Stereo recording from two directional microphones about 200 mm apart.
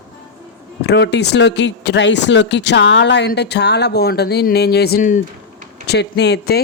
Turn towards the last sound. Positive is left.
turn(degrees=55)  # may be behind; listen again after turning